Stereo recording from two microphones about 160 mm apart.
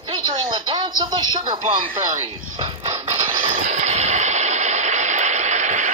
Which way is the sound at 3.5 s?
50° right (ahead or behind).